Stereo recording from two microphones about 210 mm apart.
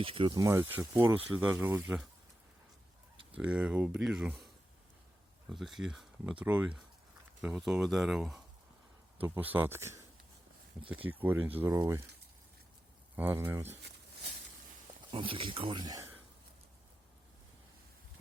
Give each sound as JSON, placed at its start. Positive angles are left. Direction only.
{"t": 0.0, "sound": "speech", "side_deg": -25}
{"t": 3.3, "sound": "speech", "side_deg": -5}
{"t": 5.5, "sound": "speech", "side_deg": 0}
{"t": 13.1, "sound": "speech", "side_deg": -10}
{"t": 15.1, "sound": "speech", "side_deg": -25}